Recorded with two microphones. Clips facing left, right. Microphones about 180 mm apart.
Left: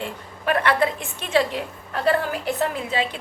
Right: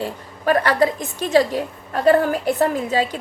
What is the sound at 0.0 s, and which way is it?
A woman's voice, 40° right (ahead or behind).